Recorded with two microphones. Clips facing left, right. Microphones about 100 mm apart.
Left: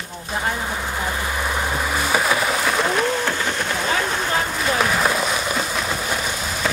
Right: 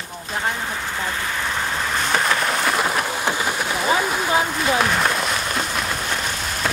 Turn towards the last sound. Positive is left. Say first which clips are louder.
# left 1 dB
turn(degrees=5)  # may be behind; listen again after turning